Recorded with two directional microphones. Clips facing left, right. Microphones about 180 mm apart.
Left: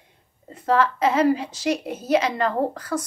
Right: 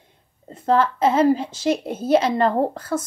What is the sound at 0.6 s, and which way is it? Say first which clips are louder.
A woman's voice: right 2 dB; 30° right (ahead or behind).